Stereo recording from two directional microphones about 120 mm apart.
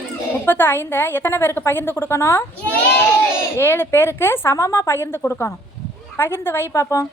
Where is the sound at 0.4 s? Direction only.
15° left (ahead or behind).